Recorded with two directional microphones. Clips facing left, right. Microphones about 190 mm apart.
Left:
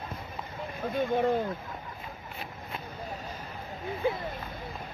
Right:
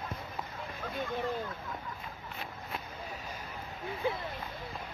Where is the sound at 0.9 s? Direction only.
55° left (ahead or behind).